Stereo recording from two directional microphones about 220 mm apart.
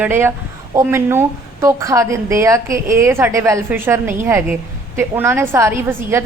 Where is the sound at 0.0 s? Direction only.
10° right (ahead or behind).